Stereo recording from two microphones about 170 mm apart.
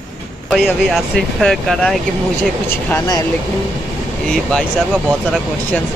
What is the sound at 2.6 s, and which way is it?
Speech, 15° left (ahead or behind).